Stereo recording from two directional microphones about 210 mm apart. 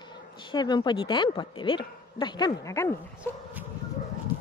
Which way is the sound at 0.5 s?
20° left (ahead or behind).